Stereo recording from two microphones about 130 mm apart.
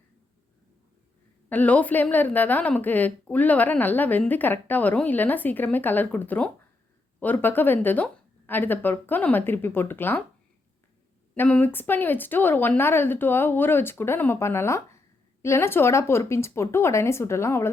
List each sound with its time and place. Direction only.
1.5 s speech: 10° left (ahead or behind)
11.3 s speech: 10° left (ahead or behind)